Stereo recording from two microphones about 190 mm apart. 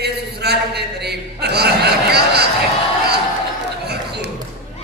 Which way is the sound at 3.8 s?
60° right (ahead or behind).